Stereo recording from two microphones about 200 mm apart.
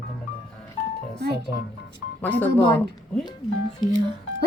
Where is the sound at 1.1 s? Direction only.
55° right (ahead or behind).